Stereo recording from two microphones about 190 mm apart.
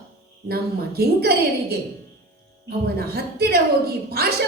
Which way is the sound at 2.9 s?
55° right (ahead or behind).